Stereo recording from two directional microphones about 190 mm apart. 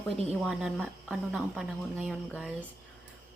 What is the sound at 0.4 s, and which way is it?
Speech, 5° right (ahead or behind).